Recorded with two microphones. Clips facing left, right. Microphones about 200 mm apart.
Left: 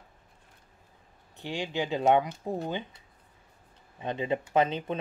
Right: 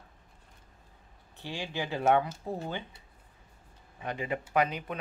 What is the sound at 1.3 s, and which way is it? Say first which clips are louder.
Speech: left 4 dB; 15° left (ahead or behind).